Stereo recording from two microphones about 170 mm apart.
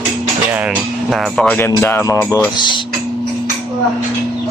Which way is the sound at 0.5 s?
Centre (ahead or behind).